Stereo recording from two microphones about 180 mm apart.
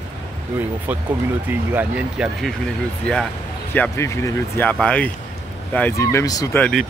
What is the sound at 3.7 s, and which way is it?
Speech, 15° left (ahead or behind).